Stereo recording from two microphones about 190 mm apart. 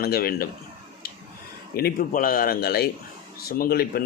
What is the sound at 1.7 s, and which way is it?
Speech, 55° left (ahead or behind).